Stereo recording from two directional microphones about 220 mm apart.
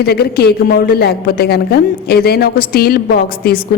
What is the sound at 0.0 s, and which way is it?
A woman's voice, 45° left (ahead or behind).